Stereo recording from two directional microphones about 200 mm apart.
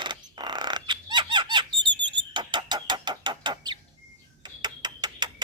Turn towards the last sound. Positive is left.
turn(degrees=-20)  # may be behind; listen again after turning